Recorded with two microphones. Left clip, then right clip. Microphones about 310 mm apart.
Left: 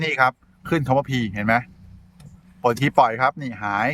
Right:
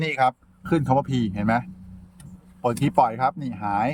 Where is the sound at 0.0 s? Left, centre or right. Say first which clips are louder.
Left 2 dB; centre.